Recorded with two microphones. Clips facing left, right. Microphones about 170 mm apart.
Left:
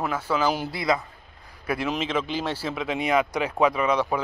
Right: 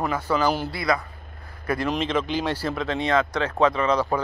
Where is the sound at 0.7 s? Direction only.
20° left (ahead or behind).